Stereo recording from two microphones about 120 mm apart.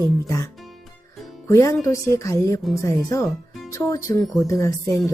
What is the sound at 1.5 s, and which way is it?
Speech, 25° left (ahead or behind).